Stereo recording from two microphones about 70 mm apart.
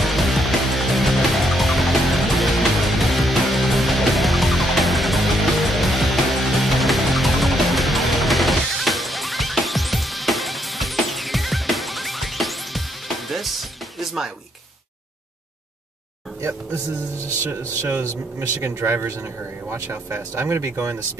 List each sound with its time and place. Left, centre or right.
0.0 s music: centre
16.3 s speech: right
17.2 s speech: left
18.1 s speech: right